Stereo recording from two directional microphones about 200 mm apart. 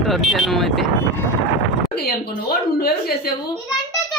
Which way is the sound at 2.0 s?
50° left (ahead or behind).